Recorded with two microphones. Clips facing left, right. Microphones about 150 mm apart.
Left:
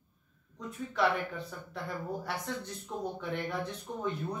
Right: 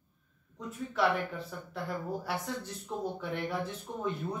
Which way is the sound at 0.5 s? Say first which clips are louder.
Even; centre (ahead or behind).